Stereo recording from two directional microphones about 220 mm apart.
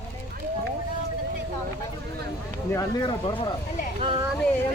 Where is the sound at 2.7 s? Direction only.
15° left (ahead or behind).